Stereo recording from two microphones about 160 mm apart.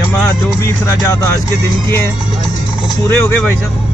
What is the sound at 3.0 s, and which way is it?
Speech, 15° left (ahead or behind).